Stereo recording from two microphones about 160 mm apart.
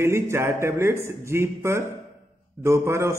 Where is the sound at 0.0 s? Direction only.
15° right (ahead or behind).